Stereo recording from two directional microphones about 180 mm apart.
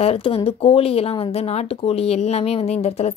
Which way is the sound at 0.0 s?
30° left (ahead or behind).